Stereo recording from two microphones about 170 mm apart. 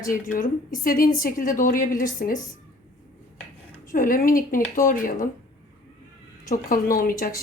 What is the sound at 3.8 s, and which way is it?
A woman's voice, 55° left (ahead or behind).